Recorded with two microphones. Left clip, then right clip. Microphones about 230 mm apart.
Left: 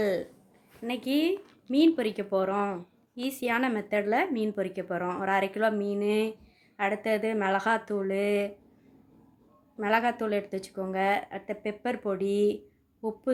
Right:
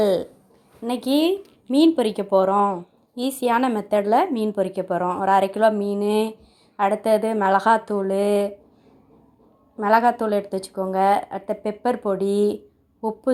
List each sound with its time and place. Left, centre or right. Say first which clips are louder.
0.0 s a woman's voice: right 9 dB; right
9.7 s a woman's voice: right 9 dB; centre